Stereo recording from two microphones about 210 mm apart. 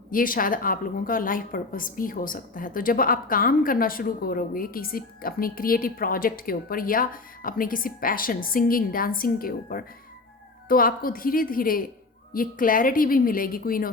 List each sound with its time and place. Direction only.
0.1 s a woman's voice: 40° left (ahead or behind)